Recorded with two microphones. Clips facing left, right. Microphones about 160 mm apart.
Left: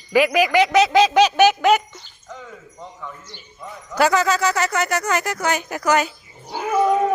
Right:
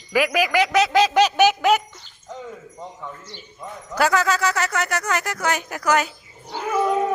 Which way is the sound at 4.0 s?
Centre (ahead or behind).